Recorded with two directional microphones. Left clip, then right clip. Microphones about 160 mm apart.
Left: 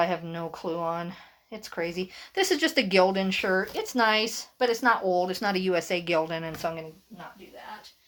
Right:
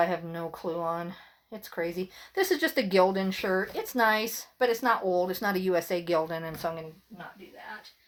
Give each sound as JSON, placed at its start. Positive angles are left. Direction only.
{"t": 0.0, "sound": "speech", "side_deg": 20}